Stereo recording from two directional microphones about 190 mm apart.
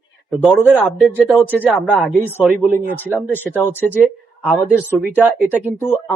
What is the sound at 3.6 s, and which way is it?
Speech, 10° left (ahead or behind).